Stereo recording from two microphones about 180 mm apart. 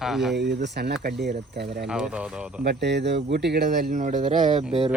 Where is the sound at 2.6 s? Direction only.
70° right (ahead or behind); by 4.6 s 40° right (ahead or behind).